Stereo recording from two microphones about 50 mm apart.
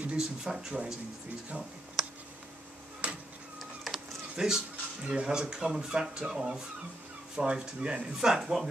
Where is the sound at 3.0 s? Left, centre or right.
Right.